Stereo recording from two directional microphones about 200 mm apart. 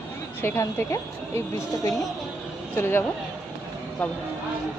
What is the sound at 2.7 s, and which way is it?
Speech, 10° left (ahead or behind).